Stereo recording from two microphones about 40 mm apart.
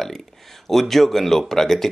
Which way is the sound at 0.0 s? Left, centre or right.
Centre.